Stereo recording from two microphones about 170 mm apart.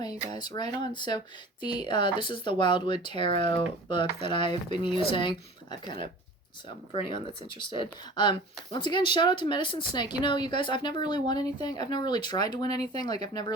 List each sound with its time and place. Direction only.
0.3 s speech: 25° left (ahead or behind)